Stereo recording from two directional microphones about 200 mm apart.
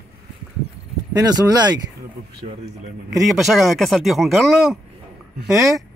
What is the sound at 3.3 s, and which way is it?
Speech, centre (ahead or behind).